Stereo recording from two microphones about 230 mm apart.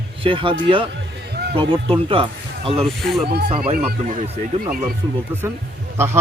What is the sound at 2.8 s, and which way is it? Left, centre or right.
Speech, centre.